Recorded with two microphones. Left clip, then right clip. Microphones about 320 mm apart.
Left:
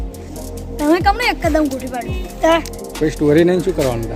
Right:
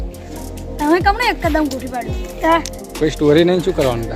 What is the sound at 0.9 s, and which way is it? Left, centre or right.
Speech, centre.